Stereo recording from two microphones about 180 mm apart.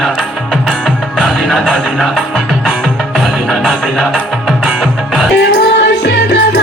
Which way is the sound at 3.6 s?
Centre (ahead or behind).